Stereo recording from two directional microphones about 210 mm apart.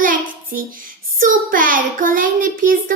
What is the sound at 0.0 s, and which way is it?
Child singing, 40° right (ahead or behind).